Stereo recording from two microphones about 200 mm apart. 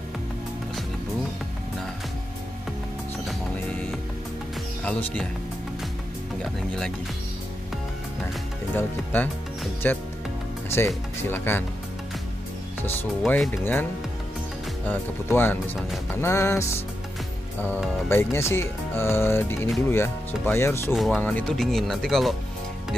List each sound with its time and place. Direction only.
4.8 s speech: 5° left (ahead or behind)
6.4 s speech: 5° left (ahead or behind)
8.7 s speech: 10° left (ahead or behind)
11.2 s speech: 10° left (ahead or behind)
13.3 s speech: 10° left (ahead or behind)
14.9 s speech: 10° left (ahead or behind)
18.0 s speech: 15° left (ahead or behind)
20.9 s speech: centre (ahead or behind)